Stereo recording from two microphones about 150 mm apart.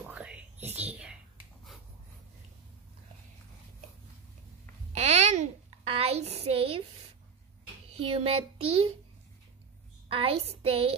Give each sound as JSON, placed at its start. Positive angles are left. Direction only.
{"t": 0.1, "sound": "whispering", "side_deg": -10}
{"t": 4.9, "sound": "a sound", "side_deg": -50}
{"t": 7.9, "sound": "speech", "side_deg": -40}
{"t": 10.0, "sound": "a woman's voice", "side_deg": -40}